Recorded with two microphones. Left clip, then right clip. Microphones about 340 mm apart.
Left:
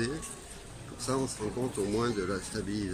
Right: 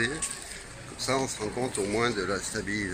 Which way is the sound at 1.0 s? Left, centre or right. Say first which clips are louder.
Right 4 dB; centre.